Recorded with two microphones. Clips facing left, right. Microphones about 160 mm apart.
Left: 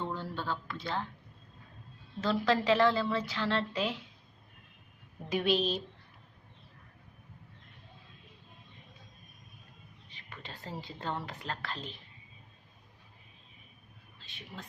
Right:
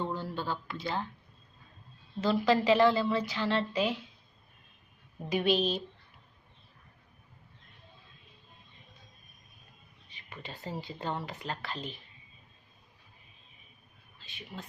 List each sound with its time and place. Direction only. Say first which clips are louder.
0.0 s a sound: right 2 dB; 5° right (ahead or behind)
2.2 s a woman's voice: right 2 dB; 5° right (ahead or behind)
5.3 s a woman's voice: right 1 dB; centre (ahead or behind)
10.4 s a woman's voice: right 3 dB; 5° right (ahead or behind)
14.2 s speech: right 3 dB; centre (ahead or behind)